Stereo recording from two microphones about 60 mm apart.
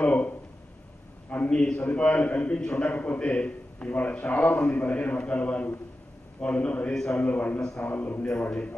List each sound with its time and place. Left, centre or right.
0.0 s a sound: left
1.3 s a man's voice: left
6.9 s a man's voice: centre
7.2 s a man's voice: left